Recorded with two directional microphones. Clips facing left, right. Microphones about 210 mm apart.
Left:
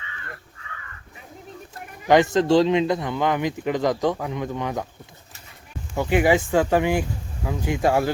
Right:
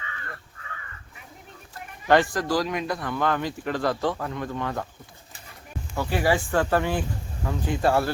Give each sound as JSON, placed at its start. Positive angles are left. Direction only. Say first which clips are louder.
{"t": 2.0, "sound": "speech", "louder": "left 4 dB", "side_deg": 20}
{"t": 6.0, "sound": "speech", "louder": "left 5 dB", "side_deg": 20}